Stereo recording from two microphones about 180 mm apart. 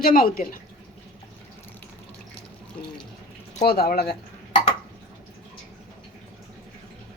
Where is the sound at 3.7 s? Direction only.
60° left (ahead or behind).